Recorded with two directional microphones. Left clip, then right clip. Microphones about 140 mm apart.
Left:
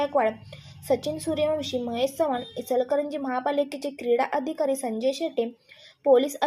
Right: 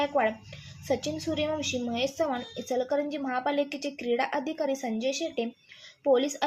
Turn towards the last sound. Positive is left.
turn(degrees=30)  # may be behind; listen again after turning